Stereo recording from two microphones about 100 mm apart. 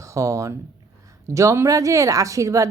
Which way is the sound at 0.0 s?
30° right (ahead or behind).